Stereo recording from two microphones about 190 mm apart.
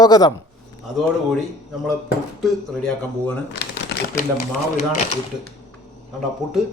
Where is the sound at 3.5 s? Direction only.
65° left (ahead or behind).